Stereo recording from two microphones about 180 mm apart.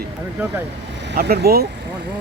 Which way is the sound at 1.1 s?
60° right (ahead or behind).